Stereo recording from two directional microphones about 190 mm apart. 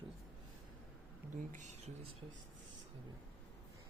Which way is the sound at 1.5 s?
40° right (ahead or behind).